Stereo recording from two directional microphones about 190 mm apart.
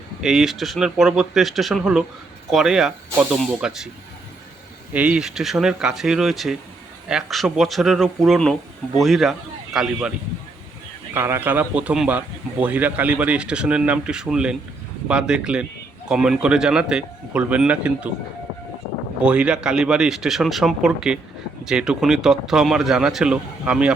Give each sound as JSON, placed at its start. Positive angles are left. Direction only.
{"t": 0.2, "sound": "speech", "side_deg": -5}
{"t": 4.9, "sound": "speech", "side_deg": -5}
{"t": 11.1, "sound": "speech", "side_deg": -10}
{"t": 19.2, "sound": "speech", "side_deg": -5}